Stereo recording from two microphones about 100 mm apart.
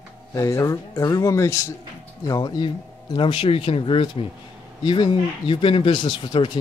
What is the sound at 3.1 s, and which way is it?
Speech, 55° left (ahead or behind).